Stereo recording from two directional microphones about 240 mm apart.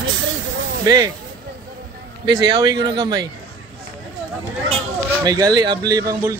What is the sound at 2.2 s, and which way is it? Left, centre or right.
Speech, centre.